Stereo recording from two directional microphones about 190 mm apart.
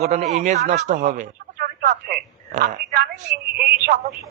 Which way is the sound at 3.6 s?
55° right (ahead or behind).